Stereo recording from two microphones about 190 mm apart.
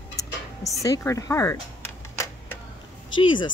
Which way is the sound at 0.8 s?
15° left (ahead or behind).